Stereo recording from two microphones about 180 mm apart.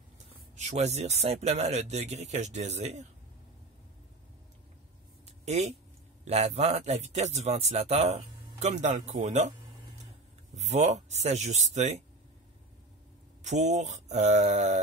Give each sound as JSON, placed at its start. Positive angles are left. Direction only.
{"t": 0.6, "sound": "speech", "side_deg": -40}
{"t": 5.4, "sound": "speech", "side_deg": -35}
{"t": 10.5, "sound": "speech", "side_deg": -40}
{"t": 13.4, "sound": "speech", "side_deg": -40}